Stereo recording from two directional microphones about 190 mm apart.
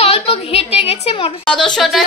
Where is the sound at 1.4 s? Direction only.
5° left (ahead or behind).